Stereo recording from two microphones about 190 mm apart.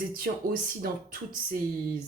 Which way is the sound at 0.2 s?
50° right (ahead or behind).